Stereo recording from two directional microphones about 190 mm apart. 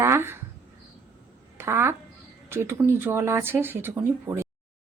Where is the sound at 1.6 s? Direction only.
15° right (ahead or behind).